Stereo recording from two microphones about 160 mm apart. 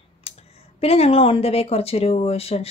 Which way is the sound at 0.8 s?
40° left (ahead or behind).